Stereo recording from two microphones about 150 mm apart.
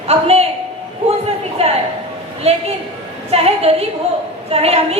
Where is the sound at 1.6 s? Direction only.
45° right (ahead or behind).